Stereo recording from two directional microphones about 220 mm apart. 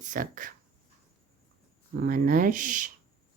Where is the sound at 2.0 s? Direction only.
40° right (ahead or behind).